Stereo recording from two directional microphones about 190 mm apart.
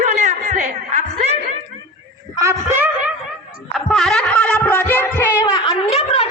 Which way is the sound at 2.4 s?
15° right (ahead or behind).